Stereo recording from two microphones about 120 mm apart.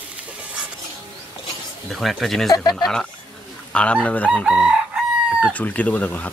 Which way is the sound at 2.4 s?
30° left (ahead or behind).